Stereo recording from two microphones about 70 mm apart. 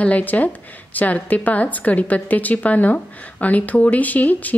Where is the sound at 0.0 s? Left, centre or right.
Left.